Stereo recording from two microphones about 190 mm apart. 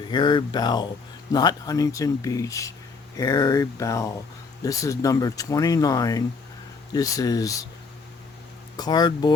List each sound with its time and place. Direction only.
0.1 s speech: 25° left (ahead or behind)
8.7 s speech: 20° left (ahead or behind)